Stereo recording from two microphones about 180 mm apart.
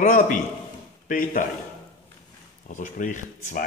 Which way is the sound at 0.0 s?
50° left (ahead or behind).